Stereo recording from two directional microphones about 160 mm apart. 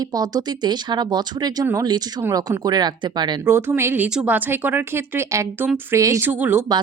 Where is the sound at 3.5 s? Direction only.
15° right (ahead or behind).